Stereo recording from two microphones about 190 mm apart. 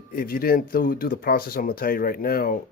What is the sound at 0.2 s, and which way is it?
Speech, 50° left (ahead or behind).